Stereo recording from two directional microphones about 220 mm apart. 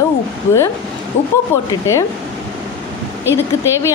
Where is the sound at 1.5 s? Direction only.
10° left (ahead or behind).